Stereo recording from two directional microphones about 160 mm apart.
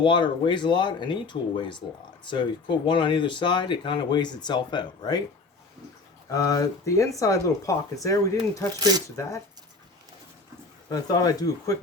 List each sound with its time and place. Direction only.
0.0 s speech: 30° left (ahead or behind)
6.3 s speech: 20° left (ahead or behind)
10.8 s speech: 25° left (ahead or behind)